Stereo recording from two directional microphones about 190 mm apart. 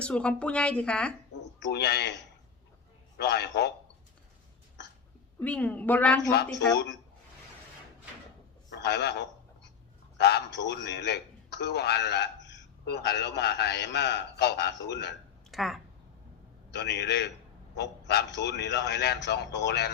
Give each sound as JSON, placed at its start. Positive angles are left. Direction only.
{"t": 0.0, "sound": "a woman's voice", "side_deg": 5}
{"t": 1.4, "sound": "a man's voice", "side_deg": 70}
{"t": 3.2, "sound": "a man's voice", "side_deg": 60}
{"t": 5.4, "sound": "a woman's voice", "side_deg": 10}
{"t": 6.2, "sound": "a man's voice", "side_deg": 60}
{"t": 8.7, "sound": "a man's voice", "side_deg": 65}
{"t": 15.4, "sound": "a sound", "side_deg": 0}
{"t": 16.7, "sound": "a man's voice", "side_deg": 65}